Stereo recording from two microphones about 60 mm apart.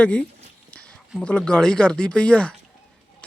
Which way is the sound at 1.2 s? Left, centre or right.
Centre.